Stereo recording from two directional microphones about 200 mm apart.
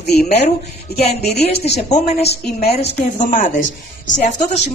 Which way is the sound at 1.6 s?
35° left (ahead or behind).